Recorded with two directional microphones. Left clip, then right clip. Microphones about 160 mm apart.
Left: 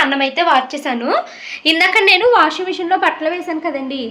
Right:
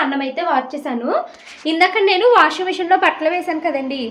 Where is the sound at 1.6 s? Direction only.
10° right (ahead or behind).